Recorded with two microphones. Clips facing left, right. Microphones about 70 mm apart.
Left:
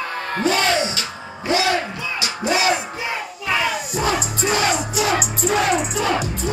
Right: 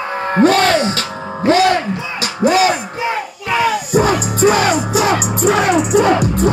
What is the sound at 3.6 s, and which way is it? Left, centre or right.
Crowd, right.